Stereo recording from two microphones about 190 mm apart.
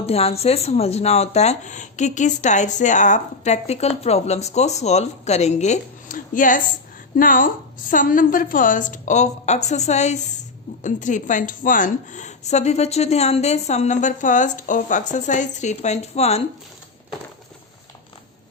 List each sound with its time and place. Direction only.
0.0 s a woman's voice: 30° left (ahead or behind)